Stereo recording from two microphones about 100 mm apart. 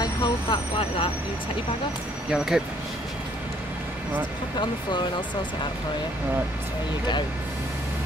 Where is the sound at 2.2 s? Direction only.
5° right (ahead or behind).